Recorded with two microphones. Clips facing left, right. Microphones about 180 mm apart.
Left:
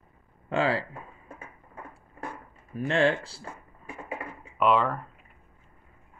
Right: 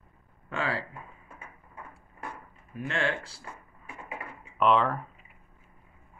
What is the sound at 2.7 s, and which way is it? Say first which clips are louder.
Speech: left 7 dB; 30° left (ahead or behind).